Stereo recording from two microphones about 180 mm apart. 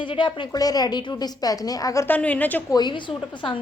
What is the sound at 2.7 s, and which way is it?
Speech, 25° left (ahead or behind).